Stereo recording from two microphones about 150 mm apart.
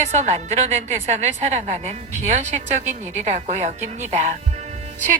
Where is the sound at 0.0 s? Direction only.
50° right (ahead or behind).